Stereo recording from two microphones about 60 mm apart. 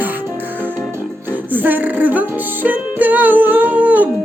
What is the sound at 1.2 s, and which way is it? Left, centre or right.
Music, right.